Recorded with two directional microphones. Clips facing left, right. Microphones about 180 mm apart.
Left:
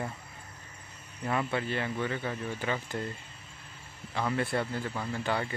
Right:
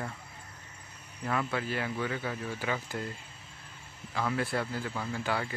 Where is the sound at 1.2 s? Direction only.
5° left (ahead or behind).